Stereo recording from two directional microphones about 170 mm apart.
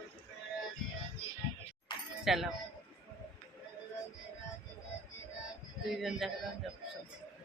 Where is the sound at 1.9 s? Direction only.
25° left (ahead or behind).